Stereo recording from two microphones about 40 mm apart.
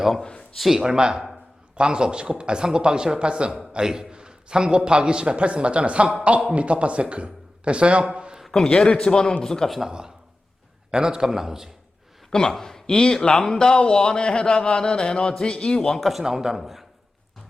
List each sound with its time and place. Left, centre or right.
0.2 s a man's voice: centre
0.7 s a man's voice: centre
8.1 s a sound: right
8.4 s a man's voice: centre
8.9 s a man's voice: left
10.9 s a man's voice: centre
12.3 s speech: centre
16.0 s a man's voice: centre